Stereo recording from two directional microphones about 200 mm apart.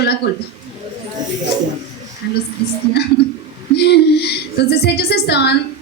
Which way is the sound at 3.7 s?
55° left (ahead or behind).